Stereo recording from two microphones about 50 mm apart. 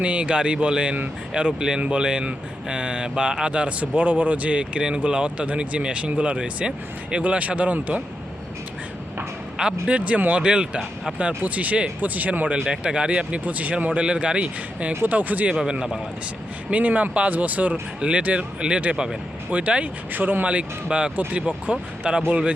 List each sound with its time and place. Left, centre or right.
0.0 s speech: right
9.6 s a man's voice: centre
9.9 s speech: right
12.5 s speech: centre; by 15.4 s right
15.7 s a man's voice: centre
16.6 s speech: right